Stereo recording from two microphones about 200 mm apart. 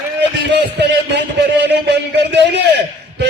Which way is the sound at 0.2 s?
60° right (ahead or behind).